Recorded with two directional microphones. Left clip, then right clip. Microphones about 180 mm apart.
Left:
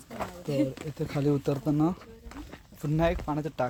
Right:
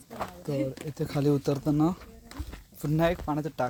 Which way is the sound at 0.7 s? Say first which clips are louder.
Right 1 dB; 20° right (ahead or behind).